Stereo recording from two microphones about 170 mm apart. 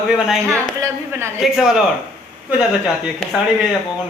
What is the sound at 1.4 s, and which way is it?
Speech, centre (ahead or behind).